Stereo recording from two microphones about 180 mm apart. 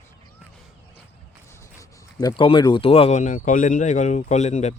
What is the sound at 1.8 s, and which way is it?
Speech, 20° left (ahead or behind).